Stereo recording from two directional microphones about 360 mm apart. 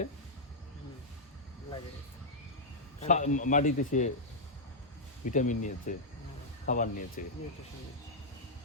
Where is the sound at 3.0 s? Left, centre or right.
Centre.